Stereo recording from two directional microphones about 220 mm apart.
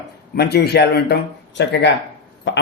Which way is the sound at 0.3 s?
45° left (ahead or behind).